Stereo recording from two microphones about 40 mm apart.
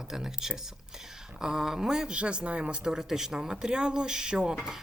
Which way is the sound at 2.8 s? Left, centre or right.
Centre.